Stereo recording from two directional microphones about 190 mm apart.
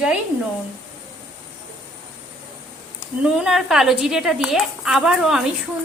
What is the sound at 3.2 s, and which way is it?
A woman's voice, 5° right (ahead or behind).